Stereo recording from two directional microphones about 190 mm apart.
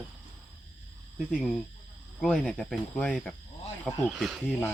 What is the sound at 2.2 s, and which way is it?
Speech, 5° left (ahead or behind).